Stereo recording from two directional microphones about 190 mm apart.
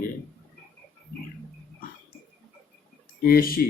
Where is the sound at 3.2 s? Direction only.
50° left (ahead or behind).